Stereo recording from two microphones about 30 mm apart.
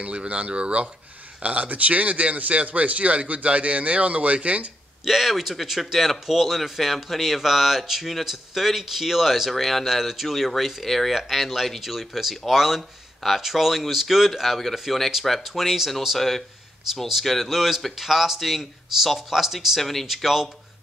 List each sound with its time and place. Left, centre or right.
0.0 s speech: right
1.4 s speech: right
5.0 s speech: centre
9.8 s speech: centre
15.5 s speech: centre
16.2 s speech: centre
17.5 s speech: centre
19.8 s speech: centre